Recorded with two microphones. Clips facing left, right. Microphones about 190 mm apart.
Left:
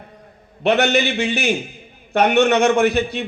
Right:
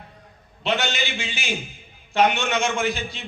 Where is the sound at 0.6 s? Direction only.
60° left (ahead or behind).